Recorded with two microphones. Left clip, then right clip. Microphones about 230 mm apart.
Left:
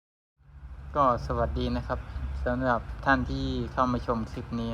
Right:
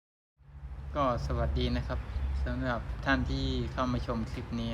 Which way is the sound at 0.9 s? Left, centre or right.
Centre.